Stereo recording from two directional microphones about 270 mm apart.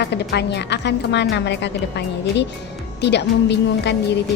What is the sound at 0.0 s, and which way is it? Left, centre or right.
A woman's voice, left.